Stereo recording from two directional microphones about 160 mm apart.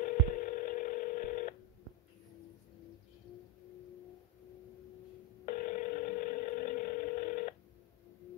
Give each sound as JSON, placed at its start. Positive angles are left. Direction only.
{"t": 0.0, "sound": "telephone dialing", "side_deg": 55}
{"t": 5.4, "sound": "telephone", "side_deg": 60}